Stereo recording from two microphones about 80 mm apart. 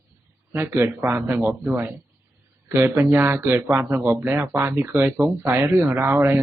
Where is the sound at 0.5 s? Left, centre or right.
Right.